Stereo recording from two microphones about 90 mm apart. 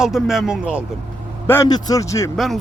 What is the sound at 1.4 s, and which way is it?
Speech, 25° left (ahead or behind).